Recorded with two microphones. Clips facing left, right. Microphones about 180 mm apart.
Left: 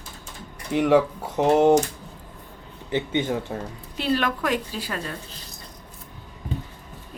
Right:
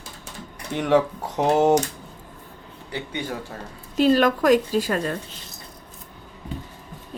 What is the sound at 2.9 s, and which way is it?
Speech, 20° left (ahead or behind).